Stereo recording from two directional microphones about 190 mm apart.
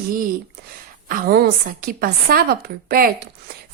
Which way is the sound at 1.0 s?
50° right (ahead or behind).